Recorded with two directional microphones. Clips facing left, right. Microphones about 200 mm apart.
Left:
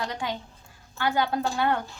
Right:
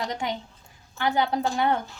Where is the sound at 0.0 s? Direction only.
20° right (ahead or behind).